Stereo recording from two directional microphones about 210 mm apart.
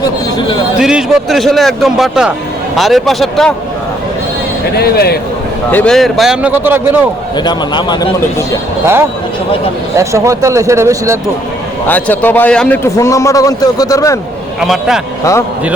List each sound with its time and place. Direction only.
0.3 s speech: 25° left (ahead or behind)
0.8 s a man's voice: 5° right (ahead or behind)
4.8 s speech: 50° left (ahead or behind)
5.7 s a man's voice: 5° left (ahead or behind)
7.3 s speech: 20° left (ahead or behind)
9.9 s a man's voice: 15° right (ahead or behind)
11.9 s a man's voice: 10° left (ahead or behind)
14.6 s a man's voice: centre (ahead or behind)
15.2 s a man's voice: 15° left (ahead or behind)